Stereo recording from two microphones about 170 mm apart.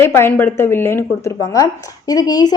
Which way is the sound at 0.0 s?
15° left (ahead or behind).